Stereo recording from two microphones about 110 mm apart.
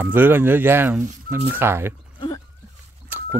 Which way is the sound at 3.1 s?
20° right (ahead or behind).